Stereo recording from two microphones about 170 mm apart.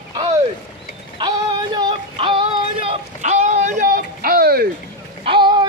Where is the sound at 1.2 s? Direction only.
25° right (ahead or behind); by 4.7 s 60° right (ahead or behind).